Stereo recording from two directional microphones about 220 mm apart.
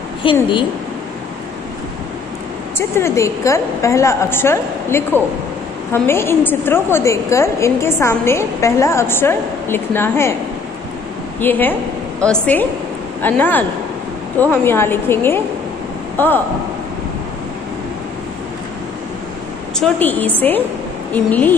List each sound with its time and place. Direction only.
0.2 s a woman's voice: 20° left (ahead or behind)
2.9 s a woman's voice: 10° left (ahead or behind)
11.4 s a woman's voice: 10° left (ahead or behind)
19.8 s a woman's voice: 10° left (ahead or behind)